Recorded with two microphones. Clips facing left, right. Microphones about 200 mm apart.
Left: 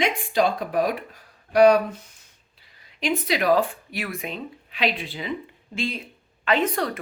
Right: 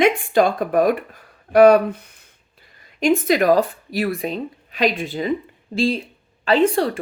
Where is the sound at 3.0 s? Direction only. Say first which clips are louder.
Right 8 dB; 45° right (ahead or behind).